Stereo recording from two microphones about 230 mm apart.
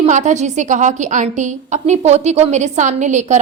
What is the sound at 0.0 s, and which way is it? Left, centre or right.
A woman's voice, right.